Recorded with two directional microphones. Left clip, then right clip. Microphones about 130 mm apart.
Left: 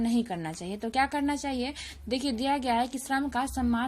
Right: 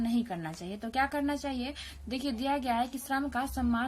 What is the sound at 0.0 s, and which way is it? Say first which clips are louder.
A woman's voice: left 3 dB; 30° left (ahead or behind).